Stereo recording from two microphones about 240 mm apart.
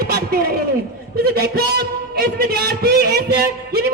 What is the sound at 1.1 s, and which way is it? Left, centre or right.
A man's voice, right.